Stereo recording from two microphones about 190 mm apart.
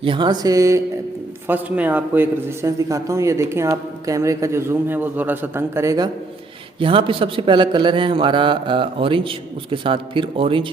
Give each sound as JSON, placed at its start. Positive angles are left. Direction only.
{"t": 0.0, "sound": "a man's voice", "side_deg": -25}
{"t": 6.7, "sound": "a man's voice", "side_deg": -25}